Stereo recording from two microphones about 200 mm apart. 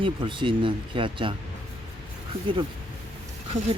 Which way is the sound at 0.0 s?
25° right (ahead or behind).